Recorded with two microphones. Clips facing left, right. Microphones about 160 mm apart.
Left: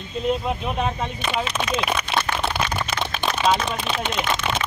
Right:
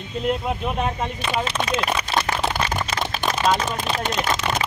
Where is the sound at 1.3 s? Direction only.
40° right (ahead or behind).